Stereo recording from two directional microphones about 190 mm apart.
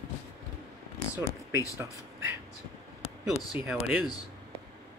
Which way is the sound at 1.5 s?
15° left (ahead or behind).